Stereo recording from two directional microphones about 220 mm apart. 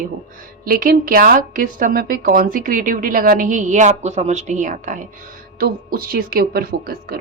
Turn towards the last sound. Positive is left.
turn(degrees=-40)  # may be behind; listen again after turning